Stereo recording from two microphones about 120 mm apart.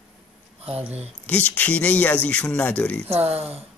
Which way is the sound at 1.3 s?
15° left (ahead or behind).